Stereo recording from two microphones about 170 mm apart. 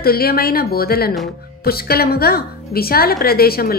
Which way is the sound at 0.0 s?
65° left (ahead or behind).